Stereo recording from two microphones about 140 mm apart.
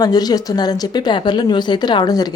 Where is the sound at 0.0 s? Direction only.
30° left (ahead or behind).